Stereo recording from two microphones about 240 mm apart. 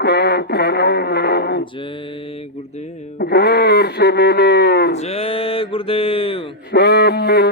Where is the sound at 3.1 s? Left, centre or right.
Left.